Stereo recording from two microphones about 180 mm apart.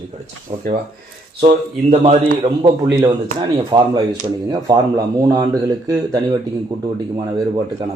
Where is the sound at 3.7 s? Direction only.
25° right (ahead or behind).